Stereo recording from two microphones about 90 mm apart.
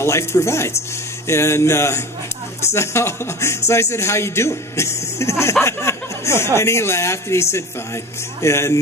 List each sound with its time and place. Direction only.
0.0 s a man's voice: 30° left (ahead or behind)